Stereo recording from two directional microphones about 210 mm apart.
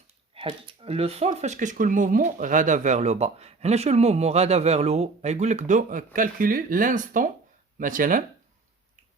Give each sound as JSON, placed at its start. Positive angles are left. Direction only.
{"t": 0.3, "sound": "speech", "side_deg": -25}